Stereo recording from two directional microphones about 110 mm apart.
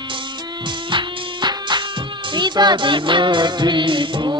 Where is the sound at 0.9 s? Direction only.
45° right (ahead or behind).